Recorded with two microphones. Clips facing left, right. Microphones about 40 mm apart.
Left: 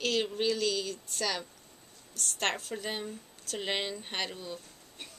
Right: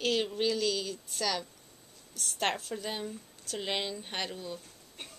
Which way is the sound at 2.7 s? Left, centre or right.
Centre.